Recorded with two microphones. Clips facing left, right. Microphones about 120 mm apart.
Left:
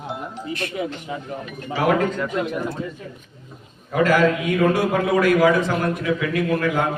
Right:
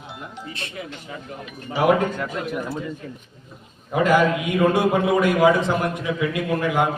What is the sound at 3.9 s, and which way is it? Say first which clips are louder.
A man's voice: left 1 dB; 20° right (ahead or behind).